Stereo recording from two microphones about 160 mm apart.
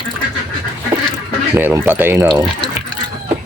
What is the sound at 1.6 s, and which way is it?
Speech, 10° right (ahead or behind).